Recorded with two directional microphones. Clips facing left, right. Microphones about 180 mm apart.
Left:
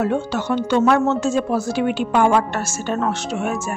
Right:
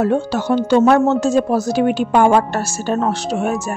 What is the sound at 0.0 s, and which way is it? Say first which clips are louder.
Speech: right 4 dB; 35° right (ahead or behind).